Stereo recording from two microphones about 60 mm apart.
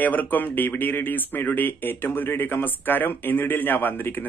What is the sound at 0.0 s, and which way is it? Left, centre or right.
Speech, left.